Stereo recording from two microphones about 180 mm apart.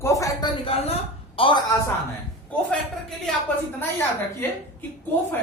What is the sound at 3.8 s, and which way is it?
Speech, 10° left (ahead or behind).